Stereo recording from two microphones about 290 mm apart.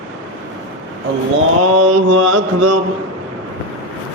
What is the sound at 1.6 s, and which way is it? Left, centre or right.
Mantra, right.